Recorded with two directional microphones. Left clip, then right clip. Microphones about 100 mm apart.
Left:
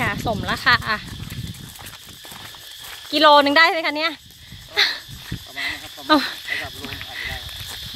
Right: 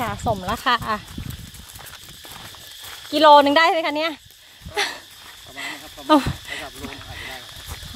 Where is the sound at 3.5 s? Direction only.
35° right (ahead or behind).